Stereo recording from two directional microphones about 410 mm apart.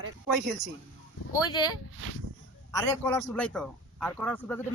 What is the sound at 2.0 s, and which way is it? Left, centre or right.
Speech, right.